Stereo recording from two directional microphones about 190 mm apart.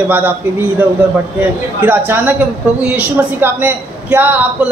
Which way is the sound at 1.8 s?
10° right (ahead or behind).